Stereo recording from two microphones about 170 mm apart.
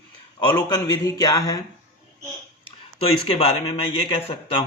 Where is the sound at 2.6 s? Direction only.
35° left (ahead or behind).